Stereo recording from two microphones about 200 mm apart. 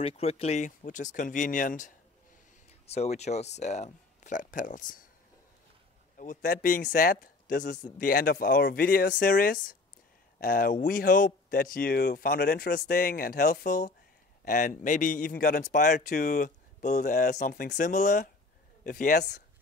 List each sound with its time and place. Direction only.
0.0 s a man's voice: 30° left (ahead or behind)
2.9 s a man's voice: 35° left (ahead or behind)
6.1 s a man's voice: 45° left (ahead or behind)